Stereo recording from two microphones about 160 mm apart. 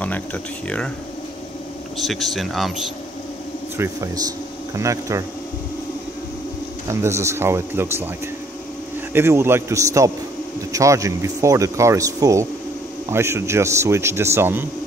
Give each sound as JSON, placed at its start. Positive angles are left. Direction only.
{"t": 0.0, "sound": "speech", "side_deg": 10}
{"t": 2.0, "sound": "speech", "side_deg": 0}
{"t": 3.7, "sound": "speech", "side_deg": -20}
{"t": 6.9, "sound": "speech", "side_deg": -20}
{"t": 9.1, "sound": "speech", "side_deg": -15}